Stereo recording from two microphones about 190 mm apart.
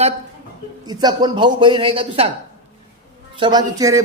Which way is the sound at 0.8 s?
20° right (ahead or behind).